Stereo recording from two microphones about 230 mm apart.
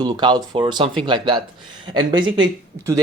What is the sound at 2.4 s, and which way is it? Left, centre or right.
Speech, centre.